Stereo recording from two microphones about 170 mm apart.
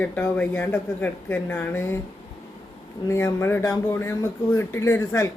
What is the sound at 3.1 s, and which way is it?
Speech, 15° left (ahead or behind).